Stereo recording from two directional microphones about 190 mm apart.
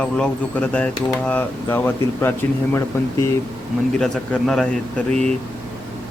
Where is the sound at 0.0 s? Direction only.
5° left (ahead or behind).